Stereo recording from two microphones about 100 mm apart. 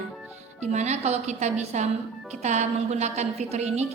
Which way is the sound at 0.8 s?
90° right.